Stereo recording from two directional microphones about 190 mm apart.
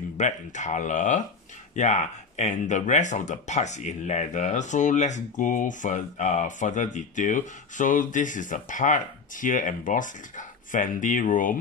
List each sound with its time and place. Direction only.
0.2 s speech: 40° left (ahead or behind)